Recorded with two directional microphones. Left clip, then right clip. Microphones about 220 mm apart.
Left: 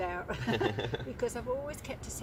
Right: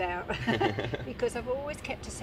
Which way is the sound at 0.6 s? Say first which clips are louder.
Right 3 dB; 15° right (ahead or behind).